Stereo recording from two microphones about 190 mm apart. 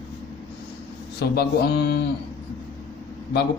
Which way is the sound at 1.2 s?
55° left (ahead or behind).